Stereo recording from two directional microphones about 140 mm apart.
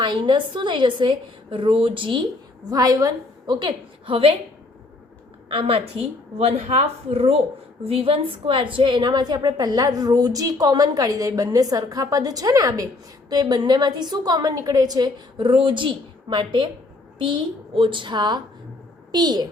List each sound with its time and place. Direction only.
0.0 s a woman's voice: 35° right (ahead or behind)
2.6 s a woman's voice: 25° right (ahead or behind)
5.5 s a woman's voice: 40° right (ahead or behind)